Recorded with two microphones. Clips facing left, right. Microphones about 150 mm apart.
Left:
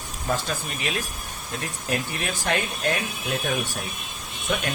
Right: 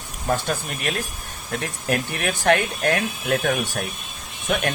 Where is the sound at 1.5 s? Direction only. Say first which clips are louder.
Right 4 dB; 65° right (ahead or behind).